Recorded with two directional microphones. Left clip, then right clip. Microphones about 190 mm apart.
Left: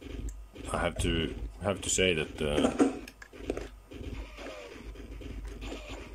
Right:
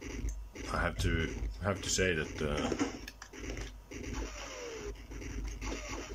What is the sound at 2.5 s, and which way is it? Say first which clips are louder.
Speech: left 10 dB; 55° left (ahead or behind).